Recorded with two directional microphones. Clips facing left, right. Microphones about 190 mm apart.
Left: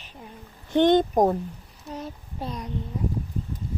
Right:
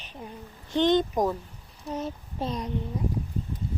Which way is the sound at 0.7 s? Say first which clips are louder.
Left 4 dB; 55° left (ahead or behind).